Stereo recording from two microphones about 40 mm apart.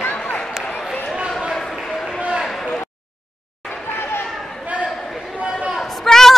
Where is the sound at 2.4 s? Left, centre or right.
Centre.